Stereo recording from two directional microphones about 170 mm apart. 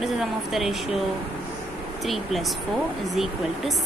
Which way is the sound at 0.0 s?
Centre (ahead or behind).